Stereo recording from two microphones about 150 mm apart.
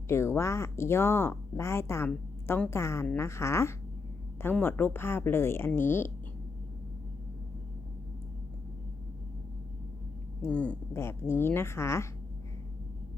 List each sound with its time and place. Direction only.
0.1 s speech: 15° left (ahead or behind)
10.4 s speech: 10° left (ahead or behind)